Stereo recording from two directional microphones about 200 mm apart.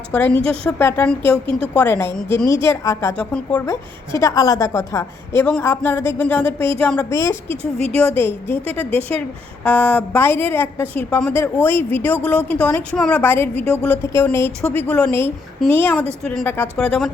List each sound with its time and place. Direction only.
0.1 s a woman's voice: 5° left (ahead or behind)
1.5 s a woman's voice: 30° right (ahead or behind)
1.7 s a woman's voice: 10° left (ahead or behind)
7.5 s speech: 30° right (ahead or behind)
7.9 s a woman's voice: 10° left (ahead or behind)